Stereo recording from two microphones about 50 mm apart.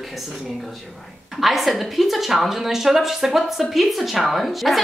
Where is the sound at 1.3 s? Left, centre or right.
Centre.